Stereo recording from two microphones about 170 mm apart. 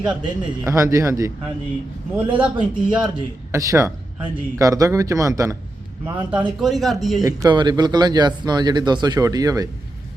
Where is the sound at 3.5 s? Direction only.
15° right (ahead or behind).